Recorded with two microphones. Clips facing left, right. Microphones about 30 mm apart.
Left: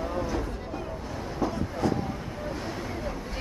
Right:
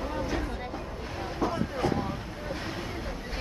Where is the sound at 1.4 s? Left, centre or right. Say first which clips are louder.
Even; centre.